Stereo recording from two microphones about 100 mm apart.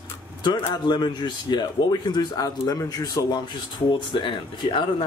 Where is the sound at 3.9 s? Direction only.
55° left (ahead or behind).